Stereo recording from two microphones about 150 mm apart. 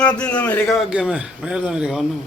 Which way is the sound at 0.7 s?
5° right (ahead or behind).